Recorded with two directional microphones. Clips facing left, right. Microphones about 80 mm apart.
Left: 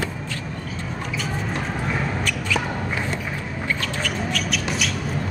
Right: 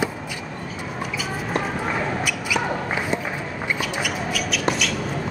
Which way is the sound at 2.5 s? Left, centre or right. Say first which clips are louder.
Right 1 dB; centre.